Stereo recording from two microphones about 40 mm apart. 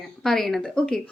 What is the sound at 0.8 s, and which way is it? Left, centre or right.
Speech, left.